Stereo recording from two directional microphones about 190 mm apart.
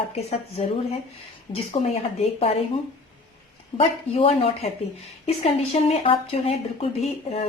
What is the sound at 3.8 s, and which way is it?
A woman's voice, 30° left (ahead or behind).